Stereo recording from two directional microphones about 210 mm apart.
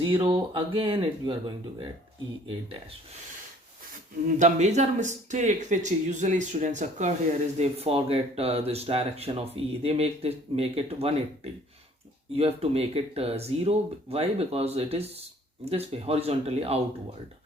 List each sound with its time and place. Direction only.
0.0 s speech: 25° right (ahead or behind)
4.4 s speech: 35° right (ahead or behind)
12.3 s speech: 30° right (ahead or behind)